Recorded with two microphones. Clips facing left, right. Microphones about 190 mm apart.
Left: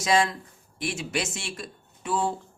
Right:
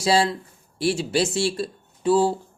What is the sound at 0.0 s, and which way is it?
Speech, 30° right (ahead or behind).